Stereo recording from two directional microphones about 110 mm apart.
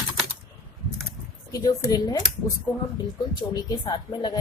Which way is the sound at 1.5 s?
35° left (ahead or behind).